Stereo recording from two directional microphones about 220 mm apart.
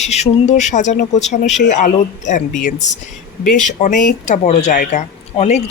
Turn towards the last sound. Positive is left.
turn(degrees=30)  # may be behind; listen again after turning